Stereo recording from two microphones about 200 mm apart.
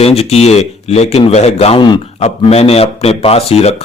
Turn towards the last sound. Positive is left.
turn(degrees=30)  # may be behind; listen again after turning